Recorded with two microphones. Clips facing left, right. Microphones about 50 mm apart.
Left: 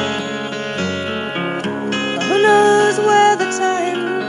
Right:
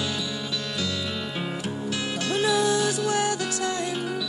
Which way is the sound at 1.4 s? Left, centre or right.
Left.